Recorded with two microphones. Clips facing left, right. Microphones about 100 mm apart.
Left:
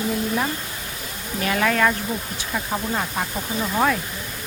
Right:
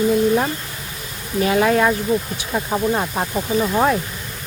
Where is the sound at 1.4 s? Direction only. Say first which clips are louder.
Right 5 dB; 25° right (ahead or behind).